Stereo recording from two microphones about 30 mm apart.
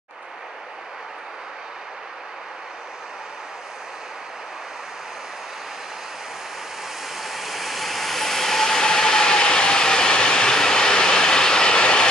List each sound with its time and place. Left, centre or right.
7.2 s vehicle: centre; by 12.1 s left